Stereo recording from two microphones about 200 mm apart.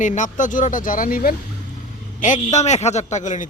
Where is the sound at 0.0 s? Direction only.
40° left (ahead or behind).